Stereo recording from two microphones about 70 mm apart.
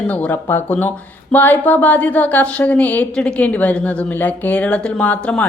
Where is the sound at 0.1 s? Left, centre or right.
Left.